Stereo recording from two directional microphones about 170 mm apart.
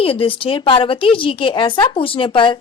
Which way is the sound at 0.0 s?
30° left (ahead or behind).